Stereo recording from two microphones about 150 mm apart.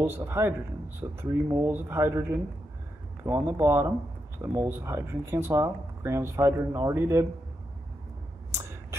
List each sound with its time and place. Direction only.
0.0 s speech: 15° right (ahead or behind)